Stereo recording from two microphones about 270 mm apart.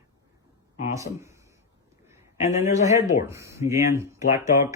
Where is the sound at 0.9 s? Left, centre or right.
Centre.